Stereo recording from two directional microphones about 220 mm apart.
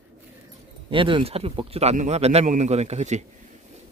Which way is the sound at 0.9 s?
25° right (ahead or behind).